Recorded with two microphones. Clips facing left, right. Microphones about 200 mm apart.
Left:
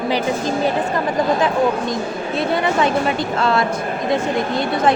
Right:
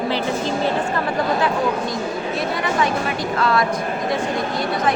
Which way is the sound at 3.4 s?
25° left (ahead or behind).